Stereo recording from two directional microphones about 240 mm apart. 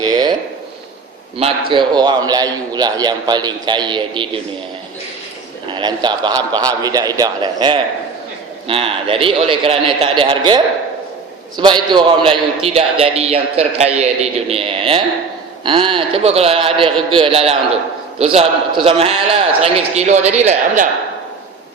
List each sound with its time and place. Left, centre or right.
0.0 s a sound: centre
1.7 s a man's voice: centre
5.6 s a man's voice: centre